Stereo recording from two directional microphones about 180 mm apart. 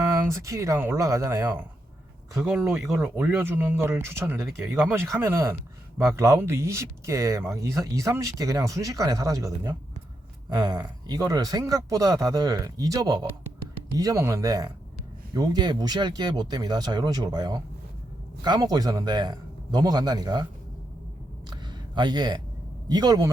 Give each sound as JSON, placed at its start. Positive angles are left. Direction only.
{"t": 0.0, "sound": "speech", "side_deg": -20}
{"t": 21.5, "sound": "a sound", "side_deg": -25}
{"t": 22.9, "sound": "speech", "side_deg": -20}